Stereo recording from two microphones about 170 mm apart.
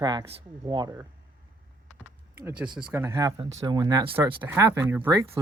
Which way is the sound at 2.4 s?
5° right (ahead or behind).